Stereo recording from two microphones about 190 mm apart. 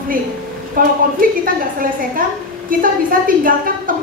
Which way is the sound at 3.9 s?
45° right (ahead or behind).